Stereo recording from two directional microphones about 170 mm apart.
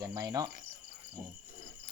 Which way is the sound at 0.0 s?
20° right (ahead or behind).